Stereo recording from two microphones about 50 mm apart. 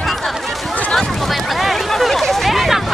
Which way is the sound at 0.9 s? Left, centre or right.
Centre.